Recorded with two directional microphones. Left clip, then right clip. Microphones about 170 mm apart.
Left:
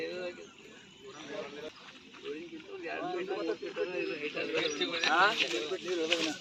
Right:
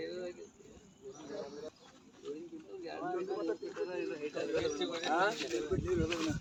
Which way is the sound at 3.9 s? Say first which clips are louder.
Left 3 dB; 35° right (ahead or behind).